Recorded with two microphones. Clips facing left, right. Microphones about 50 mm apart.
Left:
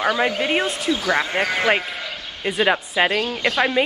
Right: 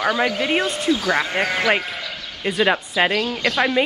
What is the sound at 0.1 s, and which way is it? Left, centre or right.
Speech, left.